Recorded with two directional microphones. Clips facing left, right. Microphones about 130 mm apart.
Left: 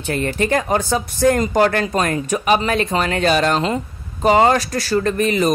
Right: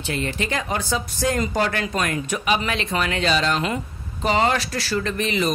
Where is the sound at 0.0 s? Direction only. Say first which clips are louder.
Left 6 dB; 50° left (ahead or behind).